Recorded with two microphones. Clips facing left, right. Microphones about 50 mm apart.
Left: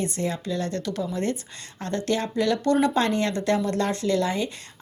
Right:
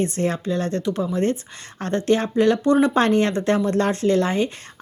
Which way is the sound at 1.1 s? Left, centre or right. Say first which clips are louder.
Right 5 dB; right.